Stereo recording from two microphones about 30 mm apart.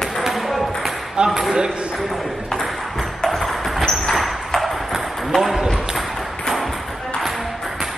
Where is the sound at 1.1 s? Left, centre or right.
Right.